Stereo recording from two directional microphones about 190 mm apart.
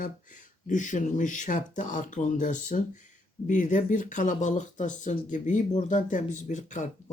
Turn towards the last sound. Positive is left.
turn(degrees=40)  # may be behind; listen again after turning